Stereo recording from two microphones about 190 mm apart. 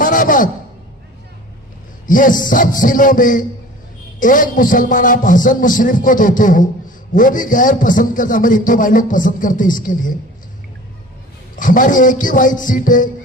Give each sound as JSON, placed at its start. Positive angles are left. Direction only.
{"t": 0.0, "sound": "a sound", "side_deg": 45}
{"t": 2.0, "sound": "a man's voice", "side_deg": 45}
{"t": 11.5, "sound": "a man's voice", "side_deg": 45}